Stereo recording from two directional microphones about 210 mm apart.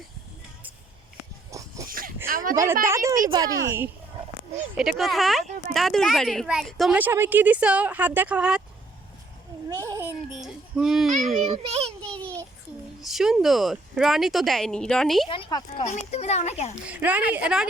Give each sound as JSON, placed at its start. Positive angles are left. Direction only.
{"t": 1.5, "sound": "a sound", "side_deg": -15}
{"t": 1.9, "sound": "a sound", "side_deg": -45}
{"t": 2.8, "sound": "a child's voice", "side_deg": -15}
{"t": 9.8, "sound": "a child's voice", "side_deg": -15}
{"t": 10.4, "sound": "speech", "side_deg": 0}
{"t": 11.5, "sound": "a child's voice", "side_deg": -30}
{"t": 12.0, "sound": "a sound", "side_deg": 5}
{"t": 13.0, "sound": "a woman's voice", "side_deg": 0}
{"t": 15.3, "sound": "a woman's voice", "side_deg": 20}
{"t": 15.8, "sound": "a child's voice", "side_deg": 30}
{"t": 16.8, "sound": "a child's voice", "side_deg": -5}